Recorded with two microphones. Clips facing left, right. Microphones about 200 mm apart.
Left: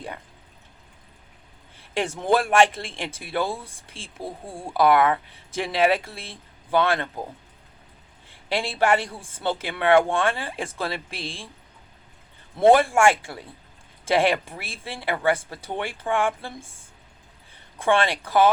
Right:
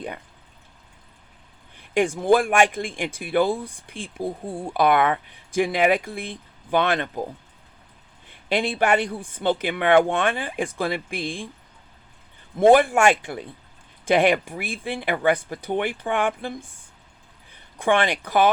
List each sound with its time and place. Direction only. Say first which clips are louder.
1.9 s speech: right 4 dB; 15° right (ahead or behind)
8.3 s speech: right 4 dB; 20° right (ahead or behind)
12.5 s speech: right 1 dB; 15° right (ahead or behind)
17.7 s speech: right 1 dB; 15° right (ahead or behind)